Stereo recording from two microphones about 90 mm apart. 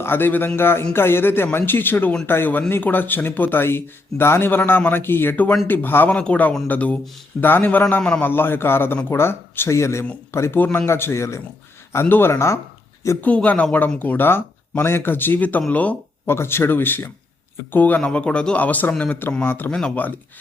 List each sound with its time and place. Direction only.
0.0 s a man's voice: 25° left (ahead or behind)
13.2 s a man's voice: 15° left (ahead or behind)
16.3 s a man's voice: 25° left (ahead or behind)